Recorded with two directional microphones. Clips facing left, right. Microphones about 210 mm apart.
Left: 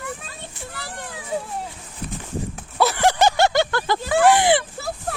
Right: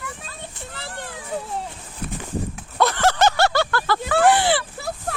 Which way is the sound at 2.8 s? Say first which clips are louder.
Left 1 dB; 10° left (ahead or behind).